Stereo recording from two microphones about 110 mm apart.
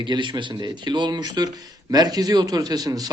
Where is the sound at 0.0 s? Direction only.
45° right (ahead or behind).